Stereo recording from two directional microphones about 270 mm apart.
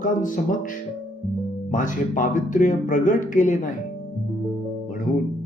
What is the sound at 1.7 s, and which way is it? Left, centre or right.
Speech, left.